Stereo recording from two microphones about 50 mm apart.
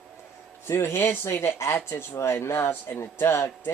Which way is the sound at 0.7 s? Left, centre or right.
Left.